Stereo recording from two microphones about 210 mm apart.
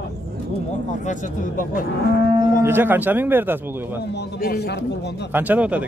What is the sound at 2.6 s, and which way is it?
A man's voice, 10° right (ahead or behind).